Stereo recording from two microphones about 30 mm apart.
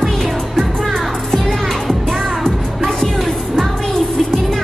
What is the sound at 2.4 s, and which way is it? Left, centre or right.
Music, centre.